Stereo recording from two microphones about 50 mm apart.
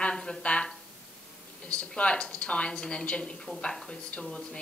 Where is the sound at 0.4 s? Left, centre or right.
Left.